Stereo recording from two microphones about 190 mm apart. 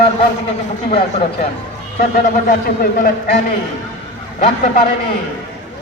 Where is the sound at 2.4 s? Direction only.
50° left (ahead or behind).